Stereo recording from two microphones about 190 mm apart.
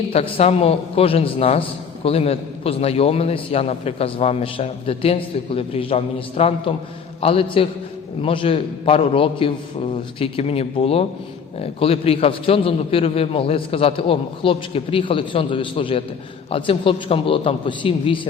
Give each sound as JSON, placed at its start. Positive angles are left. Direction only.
{"t": 0.1, "sound": "a man's voice", "side_deg": 30}